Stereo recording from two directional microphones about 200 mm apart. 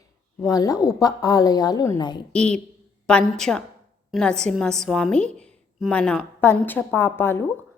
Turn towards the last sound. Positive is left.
turn(degrees=10)  # may be behind; listen again after turning